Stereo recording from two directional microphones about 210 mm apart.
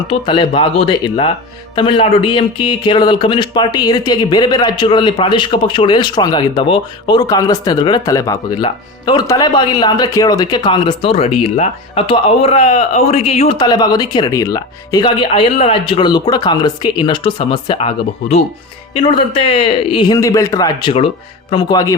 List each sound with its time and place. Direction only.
0.1 s speech: 25° left (ahead or behind)
13.6 s speech: 20° left (ahead or behind)